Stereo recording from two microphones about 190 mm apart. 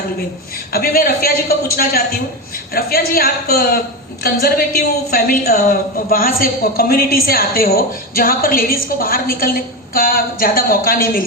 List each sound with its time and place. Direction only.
0.7 s a woman's voice: 50° left (ahead or behind)